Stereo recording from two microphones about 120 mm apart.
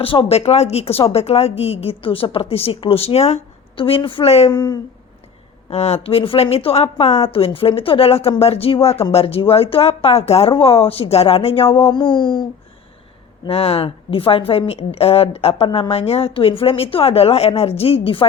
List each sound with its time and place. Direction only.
0.0 s a woman's voice: 50° left (ahead or behind)
4.5 s speech: 35° left (ahead or behind)
5.7 s a woman's voice: 60° left (ahead or behind); by 12.5 s 40° left (ahead or behind)
13.5 s a woman's voice: 55° left (ahead or behind)